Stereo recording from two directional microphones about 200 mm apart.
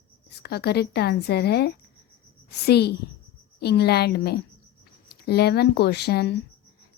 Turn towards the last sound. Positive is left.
turn(degrees=55)  # may be behind; listen again after turning